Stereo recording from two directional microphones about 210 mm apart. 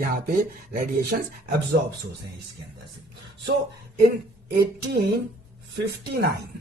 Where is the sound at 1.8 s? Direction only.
55° right (ahead or behind).